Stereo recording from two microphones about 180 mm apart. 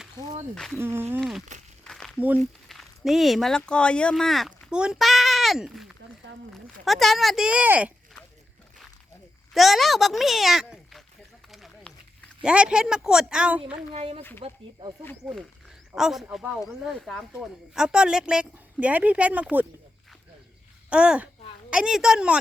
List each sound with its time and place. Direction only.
0.5 s speech: 5° left (ahead or behind)
0.8 s speech: 15° right (ahead or behind)
1.8 s a sound: 5° left (ahead or behind)
2.1 s speech: 10° right (ahead or behind)
9.6 s speech: centre (ahead or behind)
11.5 s a sound: centre (ahead or behind)
12.4 s speech: 5° right (ahead or behind)
13.9 s speech: 30° right (ahead or behind)
15.2 s speech: centre (ahead or behind)
20.9 s speech: 5° right (ahead or behind)